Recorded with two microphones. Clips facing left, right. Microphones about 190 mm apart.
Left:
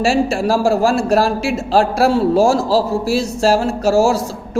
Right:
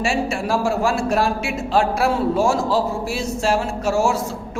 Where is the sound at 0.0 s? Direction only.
35° left (ahead or behind).